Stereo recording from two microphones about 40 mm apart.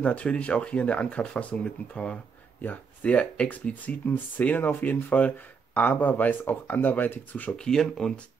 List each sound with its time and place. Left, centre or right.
0.0 s speech: left
2.6 s speech: left
7.5 s speech: centre